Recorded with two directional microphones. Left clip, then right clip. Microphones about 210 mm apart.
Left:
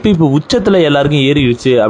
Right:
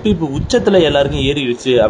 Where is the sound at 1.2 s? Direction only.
90° left.